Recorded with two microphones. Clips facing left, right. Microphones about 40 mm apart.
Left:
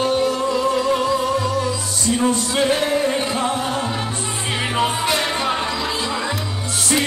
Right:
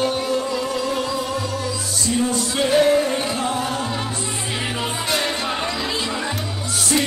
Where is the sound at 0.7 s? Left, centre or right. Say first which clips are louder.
Left 4 dB; centre.